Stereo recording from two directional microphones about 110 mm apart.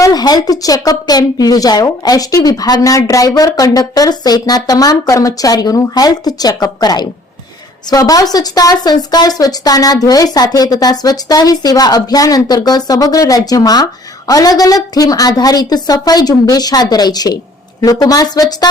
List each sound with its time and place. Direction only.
0.0 s speech: 35° left (ahead or behind)